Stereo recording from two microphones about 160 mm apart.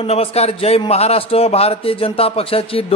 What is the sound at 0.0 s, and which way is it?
A man's voice, 40° left (ahead or behind).